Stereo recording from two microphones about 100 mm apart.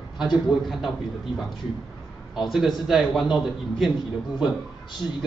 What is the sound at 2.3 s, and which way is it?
A man's voice, 5° right (ahead or behind).